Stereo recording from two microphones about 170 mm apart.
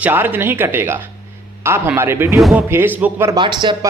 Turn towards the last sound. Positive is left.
turn(degrees=-25)  # may be behind; listen again after turning